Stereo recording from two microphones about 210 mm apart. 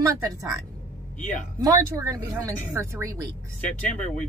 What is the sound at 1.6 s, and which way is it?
Speech, 15° right (ahead or behind).